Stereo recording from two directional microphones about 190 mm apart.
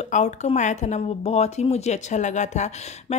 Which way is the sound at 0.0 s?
35° left (ahead or behind).